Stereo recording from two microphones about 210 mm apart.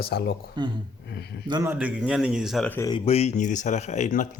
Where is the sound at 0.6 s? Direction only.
20° right (ahead or behind); by 2.9 s 10° left (ahead or behind).